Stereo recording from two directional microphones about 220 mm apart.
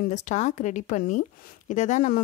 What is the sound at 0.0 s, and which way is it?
Speech, 35° left (ahead or behind).